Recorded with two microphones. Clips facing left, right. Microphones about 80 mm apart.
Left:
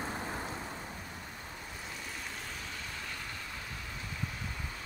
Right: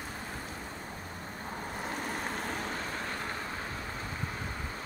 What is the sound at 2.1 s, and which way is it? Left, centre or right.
Vehicle, right.